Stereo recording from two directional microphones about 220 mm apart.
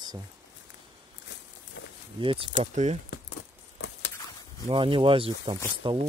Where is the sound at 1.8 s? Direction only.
55° left (ahead or behind).